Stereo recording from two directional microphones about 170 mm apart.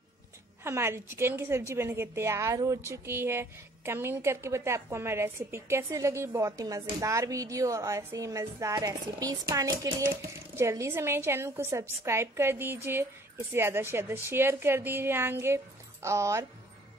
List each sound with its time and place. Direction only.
0.7 s a woman's voice: 15° right (ahead or behind)